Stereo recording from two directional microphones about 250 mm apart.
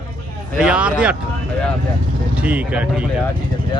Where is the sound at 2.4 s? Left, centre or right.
Centre.